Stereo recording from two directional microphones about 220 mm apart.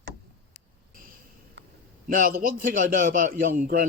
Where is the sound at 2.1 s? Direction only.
40° right (ahead or behind).